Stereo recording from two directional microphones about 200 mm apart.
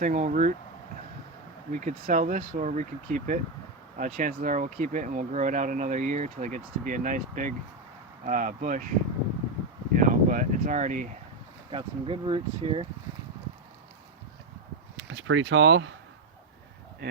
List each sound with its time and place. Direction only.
0.0 s speech: 40° right (ahead or behind)
1.7 s speech: 40° right (ahead or behind)
9.9 s a sound: 40° right (ahead or behind)
11.7 s speech: 25° right (ahead or behind)
15.3 s speech: 75° right (ahead or behind)
17.0 s a sound: 55° right (ahead or behind)